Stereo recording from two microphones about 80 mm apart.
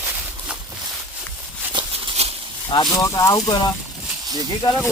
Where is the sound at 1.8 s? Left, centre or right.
Centre.